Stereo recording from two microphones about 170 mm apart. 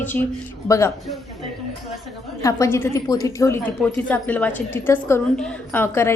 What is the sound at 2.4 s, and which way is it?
A woman's voice, 15° left (ahead or behind).